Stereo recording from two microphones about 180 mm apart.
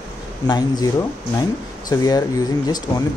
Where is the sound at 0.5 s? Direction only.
20° left (ahead or behind).